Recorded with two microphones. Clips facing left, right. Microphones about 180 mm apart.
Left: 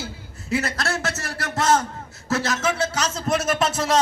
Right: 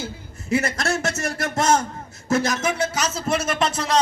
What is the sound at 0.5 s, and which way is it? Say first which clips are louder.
A man's voice: right 2 dB; 20° right (ahead or behind).